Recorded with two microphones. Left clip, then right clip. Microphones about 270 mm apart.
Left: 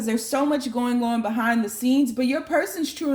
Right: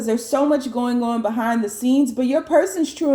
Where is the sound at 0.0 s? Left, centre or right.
Left.